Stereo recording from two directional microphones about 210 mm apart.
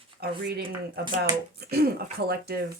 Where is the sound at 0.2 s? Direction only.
50° right (ahead or behind).